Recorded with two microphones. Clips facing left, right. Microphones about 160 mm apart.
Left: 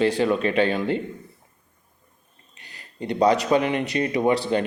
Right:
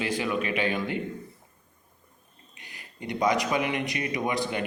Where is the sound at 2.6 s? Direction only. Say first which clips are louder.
Left 1 dB; 15° right (ahead or behind).